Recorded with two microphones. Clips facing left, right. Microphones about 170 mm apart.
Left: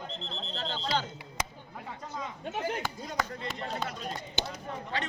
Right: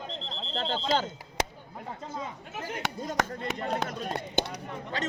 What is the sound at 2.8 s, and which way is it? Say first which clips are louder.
Speech: right 3 dB; 75° right (ahead or behind).